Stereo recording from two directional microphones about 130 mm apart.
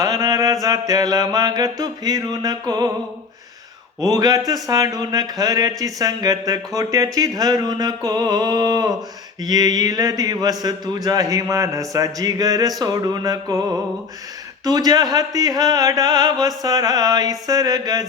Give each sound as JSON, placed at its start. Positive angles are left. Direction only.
{"t": 0.0, "sound": "mantra", "side_deg": -25}
{"t": 4.0, "sound": "speech", "side_deg": -30}